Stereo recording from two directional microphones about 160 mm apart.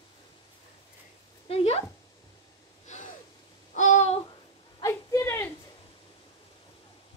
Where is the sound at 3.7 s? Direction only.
50° left (ahead or behind).